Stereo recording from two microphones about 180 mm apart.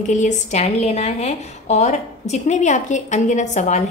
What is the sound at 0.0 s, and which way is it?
Speech, 45° left (ahead or behind).